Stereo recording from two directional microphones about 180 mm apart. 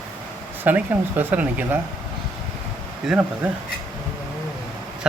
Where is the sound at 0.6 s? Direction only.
10° right (ahead or behind).